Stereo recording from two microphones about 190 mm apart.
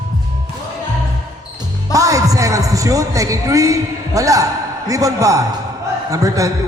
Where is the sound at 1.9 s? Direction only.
15° right (ahead or behind).